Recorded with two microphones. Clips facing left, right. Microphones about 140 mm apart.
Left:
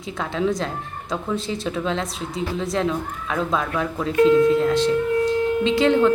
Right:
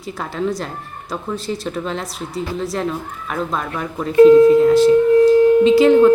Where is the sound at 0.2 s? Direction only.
Centre (ahead or behind).